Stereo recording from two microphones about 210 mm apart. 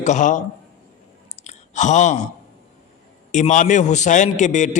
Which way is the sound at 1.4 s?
35° left (ahead or behind).